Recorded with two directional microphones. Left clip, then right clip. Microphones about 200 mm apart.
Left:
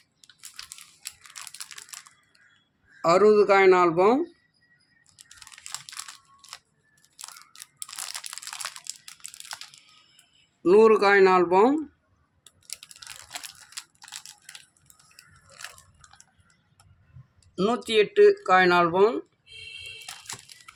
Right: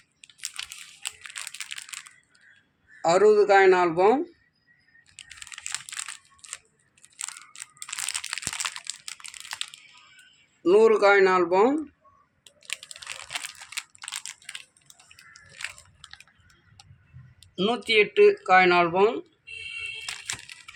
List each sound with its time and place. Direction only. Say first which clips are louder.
3.0 s speech: even; 45° left (ahead or behind)
7.2 s a sound: right 5 dB; 25° left (ahead or behind)
10.6 s speech: left 1 dB; 50° left (ahead or behind)
12.8 s computer keyboard: right 5 dB; 25° left (ahead or behind)
13.7 s computer keyboard: right 8 dB; 10° left (ahead or behind)
17.6 s speech: right 1 dB; 40° left (ahead or behind)